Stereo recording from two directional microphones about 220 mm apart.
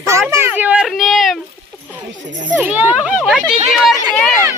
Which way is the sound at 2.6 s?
5° right (ahead or behind).